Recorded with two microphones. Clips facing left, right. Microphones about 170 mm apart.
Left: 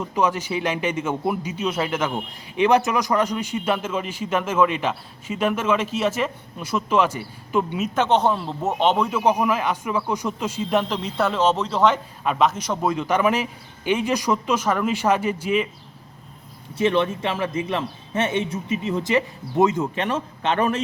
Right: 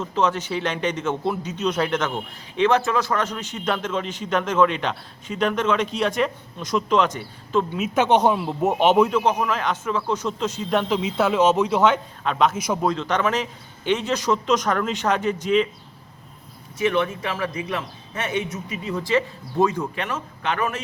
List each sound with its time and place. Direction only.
0.0 s speech: 10° left (ahead or behind)
7.8 s speech: 10° right (ahead or behind)
9.0 s speech: 10° left (ahead or behind)
12.5 s speech: 10° right (ahead or behind)
12.8 s speech: 10° left (ahead or behind)
16.7 s a man's voice: 30° left (ahead or behind)